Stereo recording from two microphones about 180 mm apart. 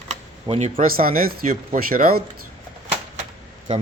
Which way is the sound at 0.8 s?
50° right (ahead or behind).